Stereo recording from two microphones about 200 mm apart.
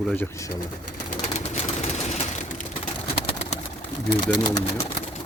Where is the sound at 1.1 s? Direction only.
35° left (ahead or behind).